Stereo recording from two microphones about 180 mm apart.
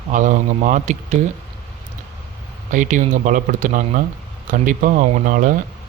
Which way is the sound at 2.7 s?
45° right (ahead or behind).